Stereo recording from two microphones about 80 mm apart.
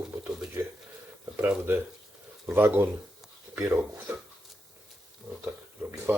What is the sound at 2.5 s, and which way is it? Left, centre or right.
Speech, right.